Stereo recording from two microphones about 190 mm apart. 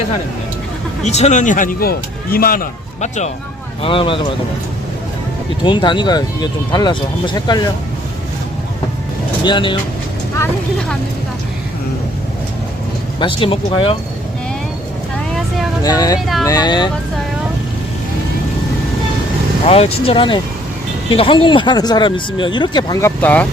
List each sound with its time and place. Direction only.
1.0 s speech: 35° left (ahead or behind)
3.8 s speech: 25° left (ahead or behind)
5.6 s speech: 25° left (ahead or behind)
9.4 s speech: 25° left (ahead or behind)
10.3 s speech: 10° left (ahead or behind)
13.1 s speech: 25° left (ahead or behind)
15.8 s speech: 20° left (ahead or behind)
19.6 s speech: 30° left (ahead or behind); by 23.5 s 10° left (ahead or behind)